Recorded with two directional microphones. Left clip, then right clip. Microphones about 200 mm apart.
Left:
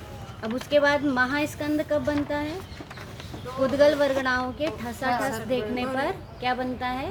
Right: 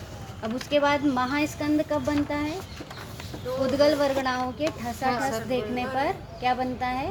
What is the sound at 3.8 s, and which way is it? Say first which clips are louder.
A woman's voice: left 2 dB; 5° right (ahead or behind).